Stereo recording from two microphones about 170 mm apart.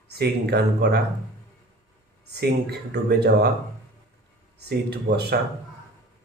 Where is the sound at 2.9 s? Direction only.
75° right (ahead or behind).